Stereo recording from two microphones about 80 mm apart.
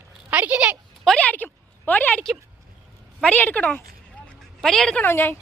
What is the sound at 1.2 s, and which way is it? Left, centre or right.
Speech, left.